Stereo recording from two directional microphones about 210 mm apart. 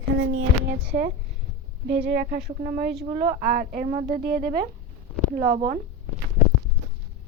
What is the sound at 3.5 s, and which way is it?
Speech, 40° right (ahead or behind).